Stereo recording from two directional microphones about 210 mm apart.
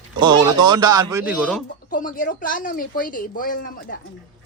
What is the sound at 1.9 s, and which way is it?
Speech, 40° left (ahead or behind).